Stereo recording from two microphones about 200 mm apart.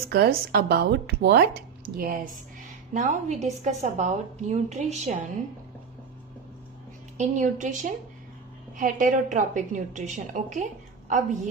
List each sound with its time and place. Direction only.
0.1 s speech: 50° right (ahead or behind)
2.9 s a woman's voice: 35° right (ahead or behind)
7.2 s a woman's voice: 40° right (ahead or behind)